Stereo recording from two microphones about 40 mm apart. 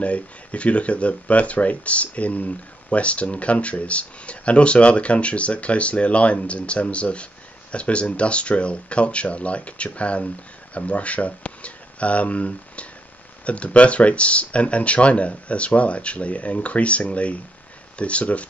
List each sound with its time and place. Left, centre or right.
0.0 s speech: left